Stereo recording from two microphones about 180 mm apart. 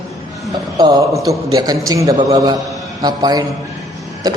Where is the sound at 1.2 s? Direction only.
20° right (ahead or behind).